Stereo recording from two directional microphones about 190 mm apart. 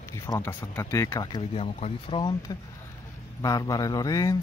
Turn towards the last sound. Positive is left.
turn(degrees=20)  # may be behind; listen again after turning